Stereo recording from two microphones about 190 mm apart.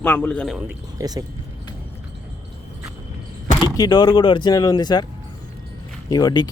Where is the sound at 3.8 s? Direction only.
20° left (ahead or behind).